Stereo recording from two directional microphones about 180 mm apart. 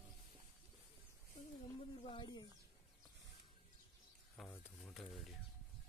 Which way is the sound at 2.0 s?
25° left (ahead or behind).